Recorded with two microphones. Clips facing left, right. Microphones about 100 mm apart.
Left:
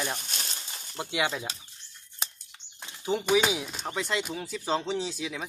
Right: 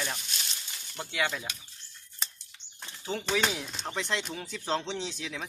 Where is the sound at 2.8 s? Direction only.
15° left (ahead or behind).